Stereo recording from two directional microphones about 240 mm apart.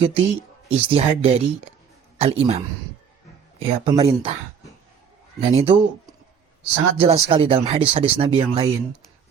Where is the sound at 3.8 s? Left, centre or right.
Centre.